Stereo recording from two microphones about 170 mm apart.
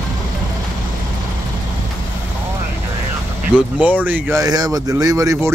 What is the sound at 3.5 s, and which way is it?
Speech, 10° right (ahead or behind).